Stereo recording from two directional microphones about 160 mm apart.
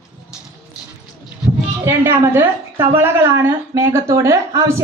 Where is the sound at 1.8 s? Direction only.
15° right (ahead or behind).